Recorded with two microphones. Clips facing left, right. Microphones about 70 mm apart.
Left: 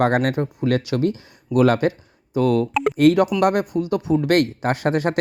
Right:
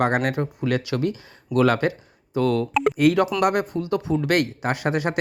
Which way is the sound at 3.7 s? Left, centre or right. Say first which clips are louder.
Left 3 dB; left.